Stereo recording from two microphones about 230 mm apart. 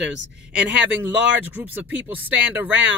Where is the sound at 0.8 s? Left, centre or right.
Centre.